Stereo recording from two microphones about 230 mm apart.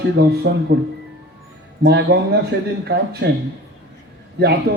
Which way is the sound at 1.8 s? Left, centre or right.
Right.